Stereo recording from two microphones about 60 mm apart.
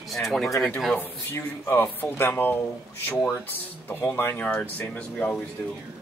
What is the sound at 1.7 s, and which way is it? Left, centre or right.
Speech, left.